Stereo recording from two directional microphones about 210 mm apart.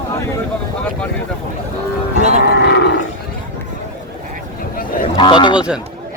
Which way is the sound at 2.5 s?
50° left (ahead or behind).